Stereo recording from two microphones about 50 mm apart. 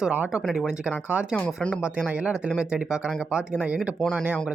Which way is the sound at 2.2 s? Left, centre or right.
Centre.